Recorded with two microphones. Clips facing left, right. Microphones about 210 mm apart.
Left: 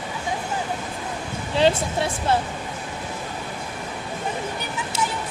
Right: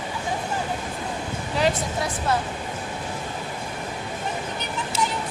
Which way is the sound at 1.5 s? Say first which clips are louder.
Left 4 dB; 30° left (ahead or behind).